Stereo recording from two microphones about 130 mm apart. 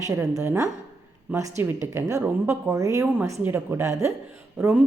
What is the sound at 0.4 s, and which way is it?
A woman's voice, 20° right (ahead or behind).